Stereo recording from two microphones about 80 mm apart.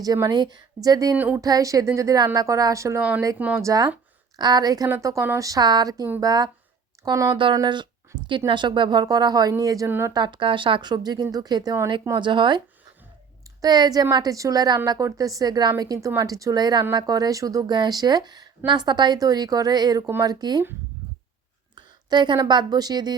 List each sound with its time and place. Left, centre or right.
0.0 s speech: right
1.1 s speech: right
1.4 s a woman's voice: right
4.4 s speech: right
4.9 s speech: right
5.4 s a woman's voice: right
7.5 s speech: right
8.4 s speech: right
10.1 s speech: right
12.2 s speech: right
13.6 s a woman's voice: right
14.8 s a woman's voice: right
15.8 s a woman's voice: right
21.8 s a woman's voice: right